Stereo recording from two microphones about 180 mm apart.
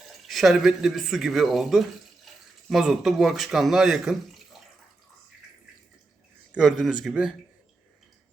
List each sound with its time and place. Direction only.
0.3 s speech: centre (ahead or behind)
6.5 s speech: centre (ahead or behind)